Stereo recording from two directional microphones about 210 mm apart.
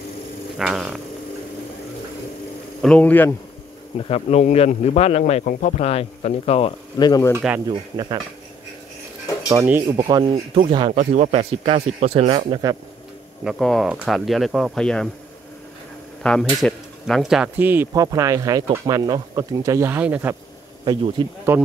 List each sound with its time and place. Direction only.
0.6 s speech: centre (ahead or behind)
2.8 s speech: 5° left (ahead or behind)
4.0 s speech: 30° left (ahead or behind)
7.3 s speech: 10° right (ahead or behind)
9.5 s speech: 10° right (ahead or behind)
11.0 s speech: 35° right (ahead or behind)
13.4 s speech: centre (ahead or behind)
16.2 s speech: 5° left (ahead or behind)
21.5 s speech: 10° right (ahead or behind)